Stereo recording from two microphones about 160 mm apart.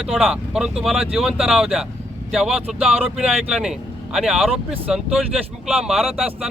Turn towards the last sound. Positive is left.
turn(degrees=0)  # may be behind; listen again after turning